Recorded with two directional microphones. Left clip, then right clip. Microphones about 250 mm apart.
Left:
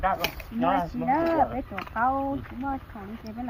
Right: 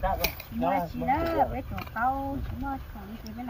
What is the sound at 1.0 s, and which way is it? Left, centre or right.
Speech, centre.